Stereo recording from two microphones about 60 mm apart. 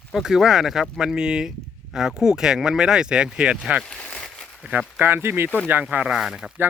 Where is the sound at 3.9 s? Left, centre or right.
Centre.